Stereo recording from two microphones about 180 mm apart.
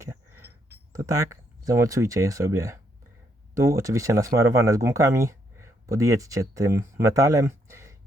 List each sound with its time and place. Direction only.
1.6 s speech: 15° right (ahead or behind)